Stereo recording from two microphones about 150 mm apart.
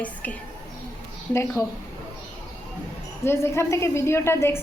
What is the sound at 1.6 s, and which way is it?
Speech, 20° left (ahead or behind).